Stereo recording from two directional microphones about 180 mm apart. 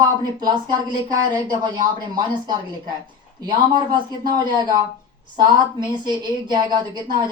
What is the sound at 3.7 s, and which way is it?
Speech, 25° right (ahead or behind).